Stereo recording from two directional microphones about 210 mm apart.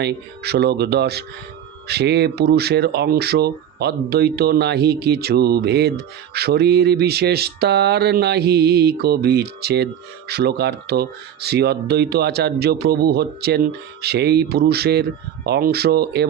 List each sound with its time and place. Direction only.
0.0 s speech: 50° right (ahead or behind)